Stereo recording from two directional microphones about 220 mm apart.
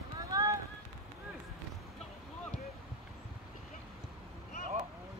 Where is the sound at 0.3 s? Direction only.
15° right (ahead or behind).